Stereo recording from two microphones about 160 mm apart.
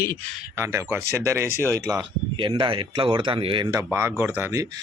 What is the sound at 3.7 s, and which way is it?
Speech, 15° right (ahead or behind).